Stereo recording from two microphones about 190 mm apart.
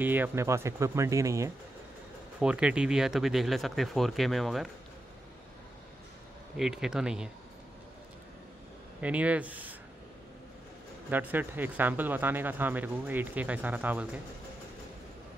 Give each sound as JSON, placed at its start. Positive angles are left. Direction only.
{"t": 0.0, "sound": "speech", "side_deg": -10}
{"t": 2.4, "sound": "speech", "side_deg": -5}
{"t": 6.5, "sound": "speech", "side_deg": 0}
{"t": 9.0, "sound": "speech", "side_deg": -5}
{"t": 11.1, "sound": "speech", "side_deg": -10}